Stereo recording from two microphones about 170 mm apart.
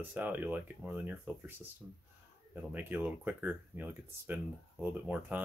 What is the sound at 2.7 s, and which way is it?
Speech, 10° right (ahead or behind).